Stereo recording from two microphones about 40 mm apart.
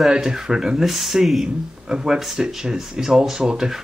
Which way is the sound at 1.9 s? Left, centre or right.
Centre.